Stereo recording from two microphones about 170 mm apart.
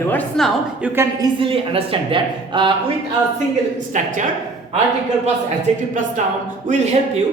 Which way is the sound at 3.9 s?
50° right (ahead or behind).